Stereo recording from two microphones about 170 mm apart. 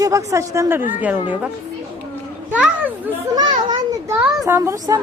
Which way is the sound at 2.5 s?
10° right (ahead or behind).